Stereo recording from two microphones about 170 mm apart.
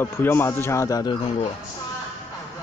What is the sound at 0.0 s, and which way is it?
A man's voice, 15° left (ahead or behind).